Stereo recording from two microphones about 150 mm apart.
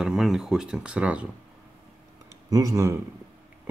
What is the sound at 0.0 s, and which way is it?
Speech, 5° right (ahead or behind).